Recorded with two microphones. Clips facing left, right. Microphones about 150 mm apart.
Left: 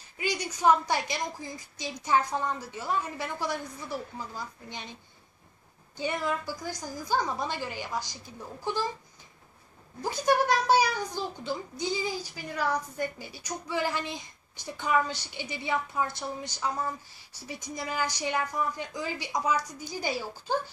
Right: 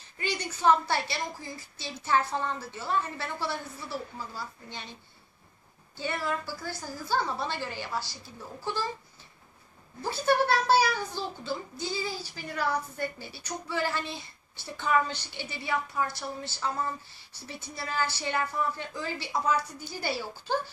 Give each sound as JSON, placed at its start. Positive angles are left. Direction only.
{"t": 0.2, "sound": "a woman's voice", "side_deg": 10}
{"t": 5.9, "sound": "a child's voice", "side_deg": 15}
{"t": 10.0, "sound": "a child's voice", "side_deg": 15}